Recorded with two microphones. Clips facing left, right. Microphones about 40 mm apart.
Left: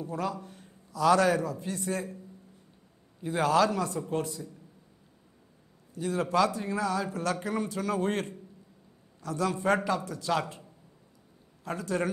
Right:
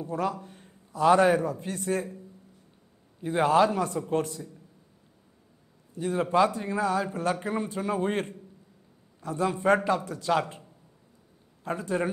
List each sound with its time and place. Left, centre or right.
0.0 s a man's voice: right
3.3 s a man's voice: right
5.9 s a man's voice: right
11.6 s a man's voice: right